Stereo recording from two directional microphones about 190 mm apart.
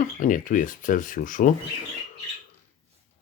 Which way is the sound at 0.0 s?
45° left (ahead or behind).